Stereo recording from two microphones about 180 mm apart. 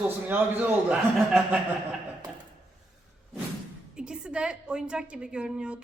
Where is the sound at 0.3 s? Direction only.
10° right (ahead or behind).